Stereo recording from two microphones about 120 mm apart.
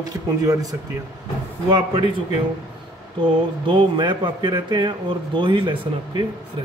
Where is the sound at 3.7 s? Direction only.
40° right (ahead or behind).